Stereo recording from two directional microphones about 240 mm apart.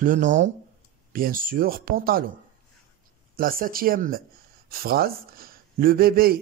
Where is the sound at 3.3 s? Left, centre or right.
Right.